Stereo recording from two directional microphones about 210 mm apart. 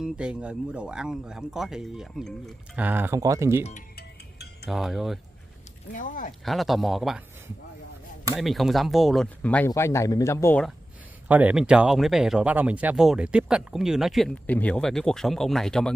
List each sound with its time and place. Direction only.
0.0 s speech: 5° right (ahead or behind)
4.6 s speech: centre (ahead or behind)
5.9 s speech: 40° left (ahead or behind)
6.4 s speech: centre (ahead or behind)
8.4 s speech: centre (ahead or behind)
11.2 s speech: 5° right (ahead or behind)